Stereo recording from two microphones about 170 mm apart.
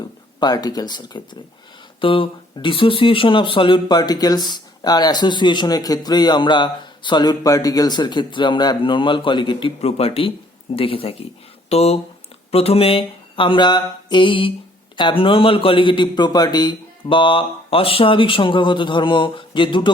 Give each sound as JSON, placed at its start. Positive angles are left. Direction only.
{"t": 0.3, "sound": "speech", "side_deg": 25}
{"t": 12.5, "sound": "mantra", "side_deg": 35}
{"t": 14.9, "sound": "speech", "side_deg": 30}